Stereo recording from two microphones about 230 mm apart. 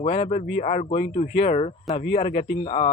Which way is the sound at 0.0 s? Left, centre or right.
Left.